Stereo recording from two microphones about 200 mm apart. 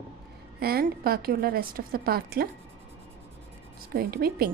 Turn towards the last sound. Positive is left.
turn(degrees=-50)  # may be behind; listen again after turning